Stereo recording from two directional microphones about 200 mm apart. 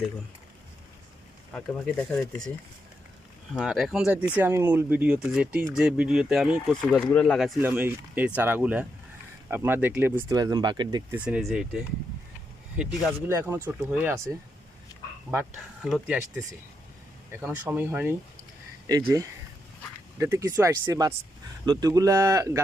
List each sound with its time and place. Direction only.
1.5 s speech: 5° left (ahead or behind)
3.5 s speech: 5° right (ahead or behind); by 11.0 s 20° right (ahead or behind)
11.1 s speech: 5° right (ahead or behind)
13.2 s speech: 10° right (ahead or behind)